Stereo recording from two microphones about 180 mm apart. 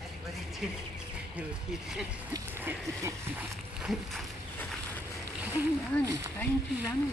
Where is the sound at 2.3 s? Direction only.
15° right (ahead or behind).